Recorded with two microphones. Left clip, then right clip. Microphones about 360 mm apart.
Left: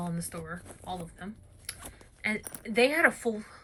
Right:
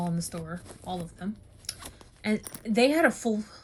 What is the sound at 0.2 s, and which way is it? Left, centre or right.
Speech, centre.